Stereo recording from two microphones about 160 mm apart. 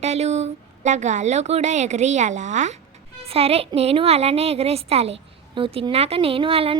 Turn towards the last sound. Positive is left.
turn(degrees=-35)  # may be behind; listen again after turning